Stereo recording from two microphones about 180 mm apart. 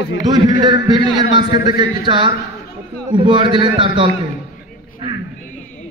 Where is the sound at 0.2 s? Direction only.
20° right (ahead or behind).